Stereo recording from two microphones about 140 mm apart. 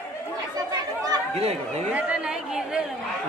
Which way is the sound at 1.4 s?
50° right (ahead or behind).